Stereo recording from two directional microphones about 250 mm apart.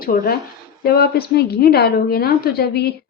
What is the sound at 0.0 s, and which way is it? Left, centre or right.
A woman's voice, left.